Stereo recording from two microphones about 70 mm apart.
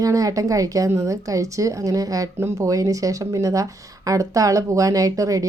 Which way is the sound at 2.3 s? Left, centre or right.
Right.